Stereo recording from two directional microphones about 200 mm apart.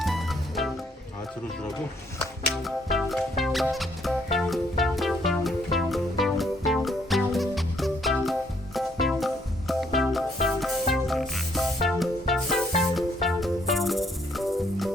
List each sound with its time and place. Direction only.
0.0 s music: centre (ahead or behind)
2.6 s music: centre (ahead or behind)